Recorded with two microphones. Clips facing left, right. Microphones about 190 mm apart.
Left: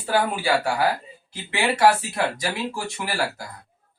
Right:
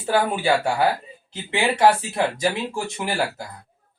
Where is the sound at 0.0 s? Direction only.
25° right (ahead or behind).